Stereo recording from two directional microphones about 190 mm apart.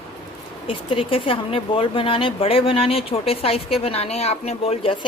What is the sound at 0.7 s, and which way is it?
Speech, 30° left (ahead or behind).